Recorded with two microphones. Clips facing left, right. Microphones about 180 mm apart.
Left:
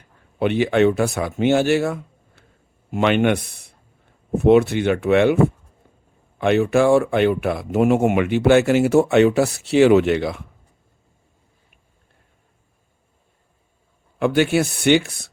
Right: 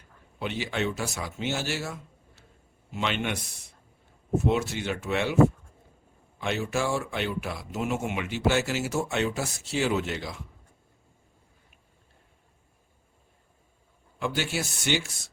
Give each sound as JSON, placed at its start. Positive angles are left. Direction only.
{"t": 0.3, "sound": "speech", "side_deg": 60}
{"t": 6.4, "sound": "speech", "side_deg": 60}
{"t": 14.2, "sound": "speech", "side_deg": 60}